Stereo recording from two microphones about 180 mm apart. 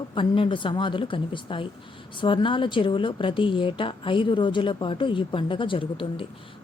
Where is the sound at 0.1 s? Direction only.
30° left (ahead or behind).